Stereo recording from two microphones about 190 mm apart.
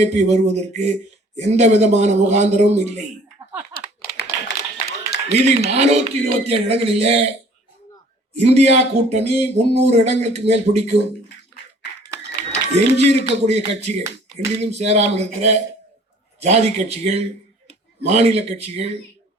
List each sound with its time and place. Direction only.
0.0 s speech: 35° right (ahead or behind)
3.8 s clapping: 60° left (ahead or behind)
5.3 s speech: 35° right (ahead or behind)
8.4 s speech: 35° right (ahead or behind)
12.5 s a man's voice: 35° right (ahead or behind)